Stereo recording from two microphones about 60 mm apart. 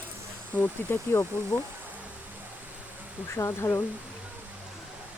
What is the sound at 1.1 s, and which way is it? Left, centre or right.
Speech, left.